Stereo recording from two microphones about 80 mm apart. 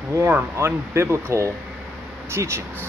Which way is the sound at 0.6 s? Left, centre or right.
Right.